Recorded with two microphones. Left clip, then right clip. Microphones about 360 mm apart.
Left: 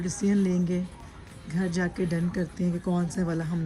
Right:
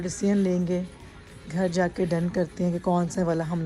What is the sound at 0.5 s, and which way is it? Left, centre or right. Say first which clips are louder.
Speech: right 3 dB; right.